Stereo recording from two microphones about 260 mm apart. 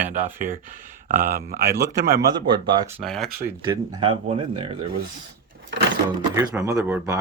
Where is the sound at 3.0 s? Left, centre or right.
Centre.